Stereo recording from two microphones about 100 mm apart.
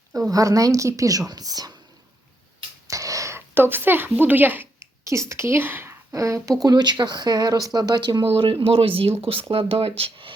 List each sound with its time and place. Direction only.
0.1 s a woman's voice: 35° right (ahead or behind)
2.8 s a sound: 35° right (ahead or behind)
3.5 s a woman's voice: 20° right (ahead or behind)
5.0 s speech: 30° right (ahead or behind)
6.6 s speech: 40° right (ahead or behind)
8.2 s speech: 65° right (ahead or behind)